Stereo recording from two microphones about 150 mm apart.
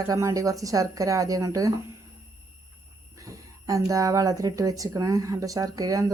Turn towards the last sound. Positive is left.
turn(degrees=-25)  # may be behind; listen again after turning